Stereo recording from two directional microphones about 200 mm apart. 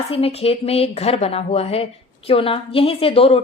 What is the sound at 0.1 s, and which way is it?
Speech, 30° left (ahead or behind).